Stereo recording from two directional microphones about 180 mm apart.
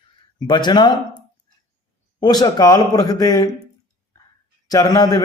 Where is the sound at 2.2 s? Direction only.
20° left (ahead or behind).